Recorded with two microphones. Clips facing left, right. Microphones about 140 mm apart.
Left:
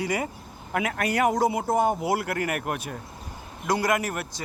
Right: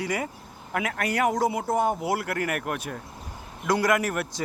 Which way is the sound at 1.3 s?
20° left (ahead or behind).